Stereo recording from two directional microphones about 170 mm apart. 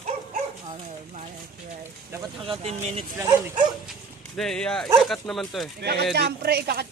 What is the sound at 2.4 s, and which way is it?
Speech, 35° right (ahead or behind).